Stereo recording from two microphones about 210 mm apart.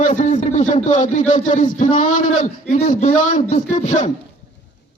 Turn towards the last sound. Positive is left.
turn(degrees=35)  # may be behind; listen again after turning